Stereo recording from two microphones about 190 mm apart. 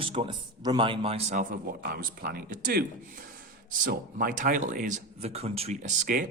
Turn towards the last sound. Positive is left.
turn(degrees=-45)  # may be behind; listen again after turning